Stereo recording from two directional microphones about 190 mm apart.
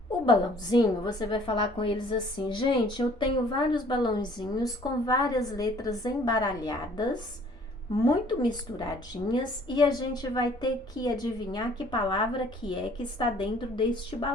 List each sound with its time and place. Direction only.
0.3 s a woman's voice: 20° left (ahead or behind)